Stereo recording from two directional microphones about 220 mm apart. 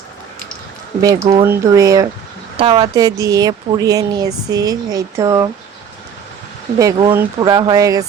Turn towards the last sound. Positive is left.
turn(degrees=-15)  # may be behind; listen again after turning